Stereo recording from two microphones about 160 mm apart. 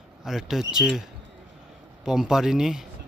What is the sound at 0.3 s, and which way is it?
Speech, centre (ahead or behind).